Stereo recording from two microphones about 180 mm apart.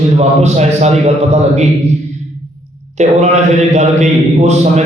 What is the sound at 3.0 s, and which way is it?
A man's voice, 40° right (ahead or behind).